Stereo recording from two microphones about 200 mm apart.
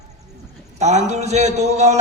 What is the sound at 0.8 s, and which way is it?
A man's voice, 35° right (ahead or behind).